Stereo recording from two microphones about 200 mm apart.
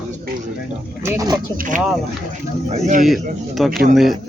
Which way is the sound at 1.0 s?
15° right (ahead or behind).